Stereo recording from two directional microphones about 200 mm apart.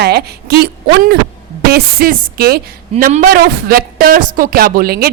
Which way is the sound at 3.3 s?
50° right (ahead or behind).